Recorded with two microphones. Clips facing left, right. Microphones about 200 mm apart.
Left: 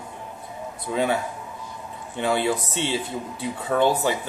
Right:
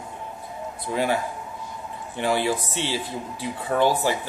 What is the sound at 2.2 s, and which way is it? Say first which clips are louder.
Speech: even; 25° left (ahead or behind).